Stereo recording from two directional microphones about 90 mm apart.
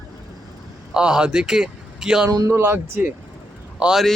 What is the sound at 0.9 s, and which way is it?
A man's voice, 10° right (ahead or behind).